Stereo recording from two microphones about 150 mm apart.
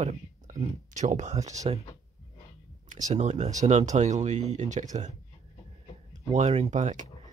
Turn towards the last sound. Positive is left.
turn(degrees=-55)  # may be behind; listen again after turning